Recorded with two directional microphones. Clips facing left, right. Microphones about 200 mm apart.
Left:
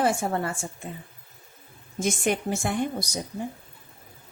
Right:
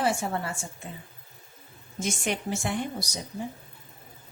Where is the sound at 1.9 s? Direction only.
50° left (ahead or behind).